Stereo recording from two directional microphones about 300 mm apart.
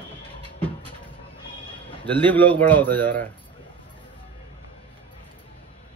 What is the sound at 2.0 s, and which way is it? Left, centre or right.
A man's voice, centre.